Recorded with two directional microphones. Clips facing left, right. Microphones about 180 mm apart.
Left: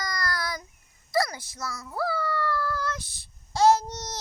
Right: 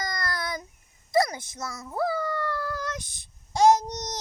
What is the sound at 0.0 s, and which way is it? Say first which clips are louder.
Child singing: even; 25° right (ahead or behind).